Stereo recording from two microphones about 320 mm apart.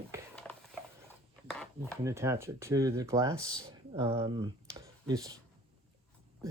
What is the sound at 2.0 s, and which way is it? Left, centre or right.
Speech, centre.